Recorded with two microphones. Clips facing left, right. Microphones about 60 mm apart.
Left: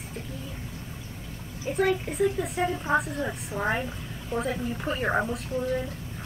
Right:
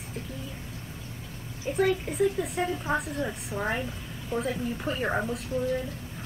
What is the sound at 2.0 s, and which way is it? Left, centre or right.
A woman's voice, centre.